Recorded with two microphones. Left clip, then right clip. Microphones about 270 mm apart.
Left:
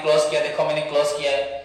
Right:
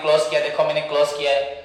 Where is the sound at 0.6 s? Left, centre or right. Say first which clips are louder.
Right 2 dB; centre.